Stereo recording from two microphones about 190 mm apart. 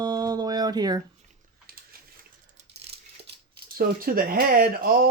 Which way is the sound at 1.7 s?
50° right (ahead or behind).